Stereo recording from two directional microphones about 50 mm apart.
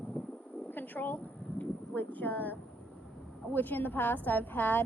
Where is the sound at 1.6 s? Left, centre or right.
Left.